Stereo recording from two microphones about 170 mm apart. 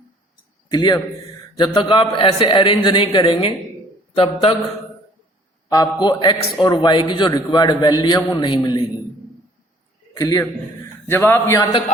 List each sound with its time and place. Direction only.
0.7 s a man's voice: 25° left (ahead or behind)
5.6 s a man's voice: 20° left (ahead or behind)
10.2 s a man's voice: 20° left (ahead or behind)